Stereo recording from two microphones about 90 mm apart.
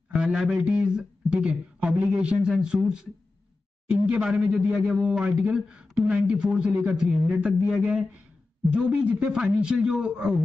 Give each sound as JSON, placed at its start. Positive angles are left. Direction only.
{"t": 0.1, "sound": "a man's voice", "side_deg": -10}
{"t": 0.6, "sound": "speech", "side_deg": -20}